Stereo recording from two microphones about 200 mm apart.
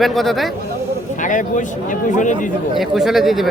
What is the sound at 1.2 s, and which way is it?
A man's voice, 40° left (ahead or behind).